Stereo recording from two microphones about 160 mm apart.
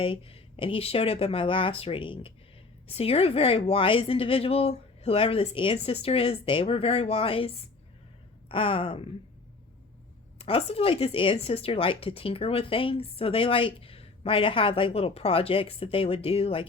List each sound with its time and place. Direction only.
0.0 s speech: 35° left (ahead or behind)
10.3 s speech: 40° left (ahead or behind)